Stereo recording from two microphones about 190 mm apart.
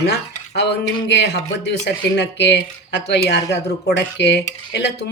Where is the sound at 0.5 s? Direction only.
65° left (ahead or behind).